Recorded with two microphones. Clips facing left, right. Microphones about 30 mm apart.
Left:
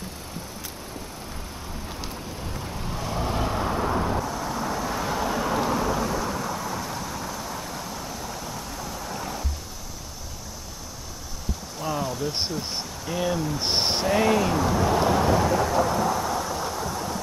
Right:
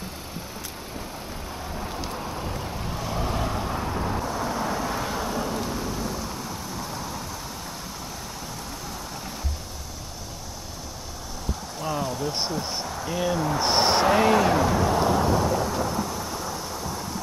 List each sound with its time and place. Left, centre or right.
1.9 s vehicle: centre
4.2 s vehicle: centre
5.2 s vehicle: centre
7.0 s vehicle: centre
9.1 s vehicle: centre
11.8 s a sound: centre
13.0 s speech: centre
14.1 s speech: centre
14.9 s thunder: centre